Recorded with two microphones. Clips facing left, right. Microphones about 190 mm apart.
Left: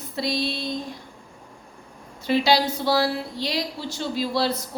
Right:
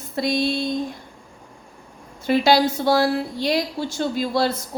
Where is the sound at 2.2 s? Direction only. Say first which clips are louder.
Right 3 dB; 50° right (ahead or behind).